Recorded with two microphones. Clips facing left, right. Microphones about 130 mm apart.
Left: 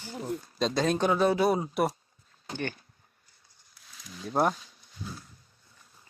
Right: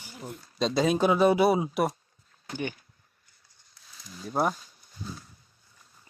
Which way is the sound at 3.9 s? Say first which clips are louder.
Left 1 dB; centre (ahead or behind).